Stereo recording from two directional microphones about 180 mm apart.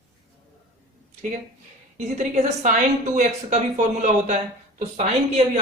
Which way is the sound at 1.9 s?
40° right (ahead or behind).